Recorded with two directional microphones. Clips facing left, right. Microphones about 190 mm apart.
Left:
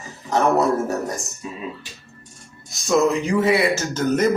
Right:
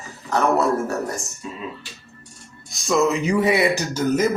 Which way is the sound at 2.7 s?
Centre (ahead or behind).